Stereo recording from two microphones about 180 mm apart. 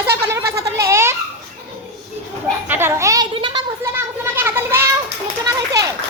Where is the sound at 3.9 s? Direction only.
10° right (ahead or behind).